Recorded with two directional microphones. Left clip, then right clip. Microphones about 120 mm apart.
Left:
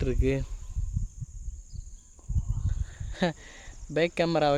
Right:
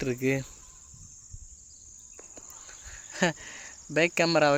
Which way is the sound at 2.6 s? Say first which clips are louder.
Right 2 dB; 20° left (ahead or behind).